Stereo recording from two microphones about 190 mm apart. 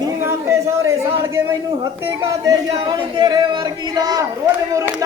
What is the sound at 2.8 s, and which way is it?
Speech, 20° right (ahead or behind).